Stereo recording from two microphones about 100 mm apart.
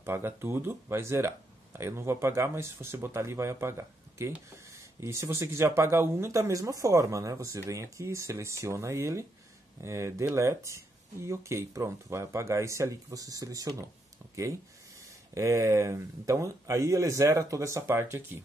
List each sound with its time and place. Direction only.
0.0 s speech: 25° right (ahead or behind)
15.3 s speech: 30° right (ahead or behind)